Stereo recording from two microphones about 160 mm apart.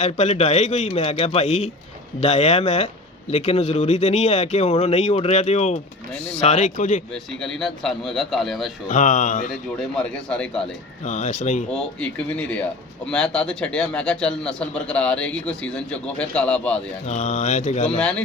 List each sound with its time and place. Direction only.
0.0 s speech: 45° left (ahead or behind)
7.1 s a man's voice: 5° left (ahead or behind)
8.9 s speech: 50° left (ahead or behind)
9.7 s a man's voice: 5° left (ahead or behind)
11.0 s speech: 50° left (ahead or behind)
11.7 s a man's voice: 5° left (ahead or behind)
17.1 s speech: 50° left (ahead or behind)
17.9 s speech: 5° left (ahead or behind)